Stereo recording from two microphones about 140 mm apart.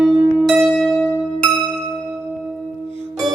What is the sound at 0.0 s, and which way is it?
Music, centre (ahead or behind).